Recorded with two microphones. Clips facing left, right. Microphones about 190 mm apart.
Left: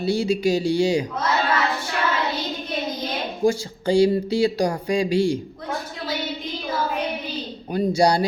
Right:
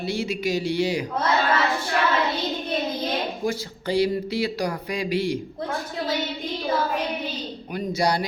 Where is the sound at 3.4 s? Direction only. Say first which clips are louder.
Left 6 dB; 25° left (ahead or behind).